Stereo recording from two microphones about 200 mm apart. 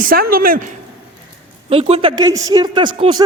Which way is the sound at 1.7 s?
30° right (ahead or behind).